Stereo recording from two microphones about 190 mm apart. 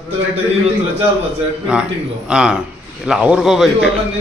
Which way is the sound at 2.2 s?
5° right (ahead or behind).